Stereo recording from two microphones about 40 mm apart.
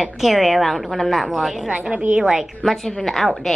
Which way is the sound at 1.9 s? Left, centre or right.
Right.